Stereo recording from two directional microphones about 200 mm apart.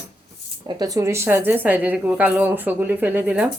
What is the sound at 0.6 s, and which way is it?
A woman's voice, 20° right (ahead or behind).